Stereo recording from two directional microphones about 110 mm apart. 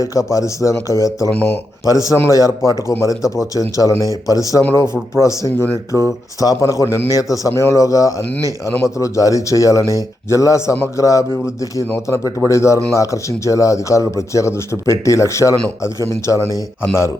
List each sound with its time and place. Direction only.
0.0 s speech: 30° left (ahead or behind)
1.3 s speech: 15° left (ahead or behind)
2.1 s speech: 25° left (ahead or behind)